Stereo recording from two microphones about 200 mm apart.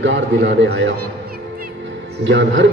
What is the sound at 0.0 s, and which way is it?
Speech, 65° right (ahead or behind).